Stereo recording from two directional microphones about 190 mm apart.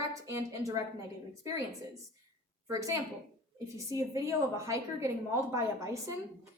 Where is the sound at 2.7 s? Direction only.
15° right (ahead or behind).